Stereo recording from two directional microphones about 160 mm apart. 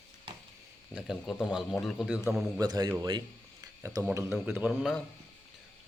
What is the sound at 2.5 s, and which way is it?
Speech, 25° right (ahead or behind).